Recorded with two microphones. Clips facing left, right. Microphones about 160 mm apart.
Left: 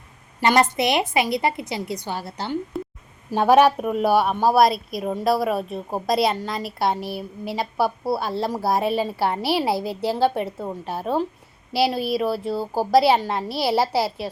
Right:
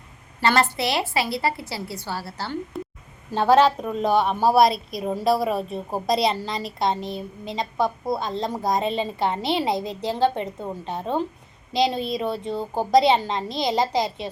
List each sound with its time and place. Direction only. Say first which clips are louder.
0.3 s a woman's voice: left 3 dB; 15° left (ahead or behind)